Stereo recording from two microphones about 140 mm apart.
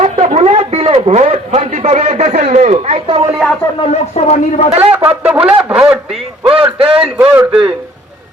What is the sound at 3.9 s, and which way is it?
Speech, 50° left (ahead or behind).